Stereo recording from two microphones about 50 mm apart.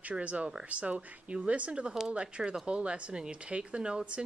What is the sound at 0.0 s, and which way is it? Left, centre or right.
Speech, right.